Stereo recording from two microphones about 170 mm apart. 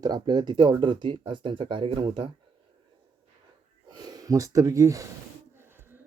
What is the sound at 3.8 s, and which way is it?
Speech, 25° right (ahead or behind).